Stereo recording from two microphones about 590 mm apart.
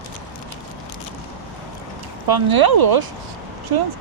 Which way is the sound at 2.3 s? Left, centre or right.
Right.